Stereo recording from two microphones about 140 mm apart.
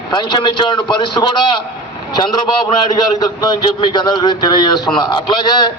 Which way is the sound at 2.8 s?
30° left (ahead or behind).